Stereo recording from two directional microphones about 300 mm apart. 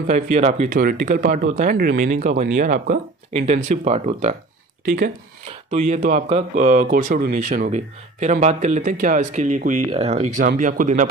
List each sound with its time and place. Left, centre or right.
0.0 s speech: right